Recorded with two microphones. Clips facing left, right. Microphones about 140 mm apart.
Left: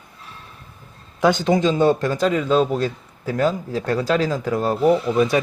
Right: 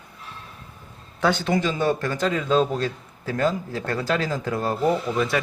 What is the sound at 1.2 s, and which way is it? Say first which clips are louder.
Speech: left 5 dB; 15° left (ahead or behind).